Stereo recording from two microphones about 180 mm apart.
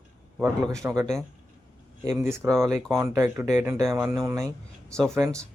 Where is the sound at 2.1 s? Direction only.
15° right (ahead or behind).